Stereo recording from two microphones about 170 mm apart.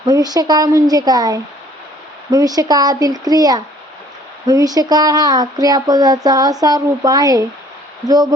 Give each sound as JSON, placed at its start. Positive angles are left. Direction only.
{"t": 0.0, "sound": "speech", "side_deg": -20}